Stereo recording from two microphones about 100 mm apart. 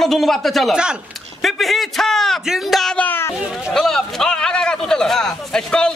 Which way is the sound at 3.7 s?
5° left (ahead or behind).